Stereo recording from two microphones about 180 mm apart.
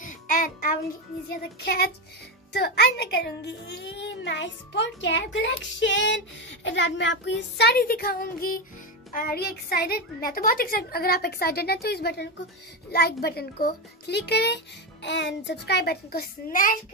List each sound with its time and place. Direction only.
0.0 s music: 45° left (ahead or behind)
1.3 s a woman's voice: 60° left (ahead or behind); by 5.5 s 85° left
5.6 s child singing: 85° left; by 8.6 s 50° left (ahead or behind)
9.1 s speech: 55° left (ahead or behind)